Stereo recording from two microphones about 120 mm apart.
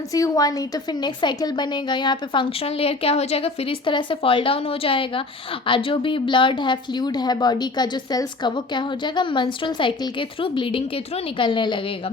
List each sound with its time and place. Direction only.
0.1 s a woman's voice: 30° left (ahead or behind); by 12.1 s 50° left (ahead or behind)